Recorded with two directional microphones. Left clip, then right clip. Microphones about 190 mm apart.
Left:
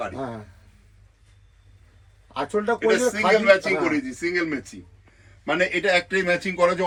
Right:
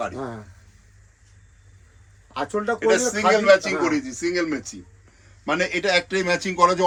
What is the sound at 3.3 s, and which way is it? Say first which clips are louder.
A man's voice: right 1 dB; 30° right (ahead or behind).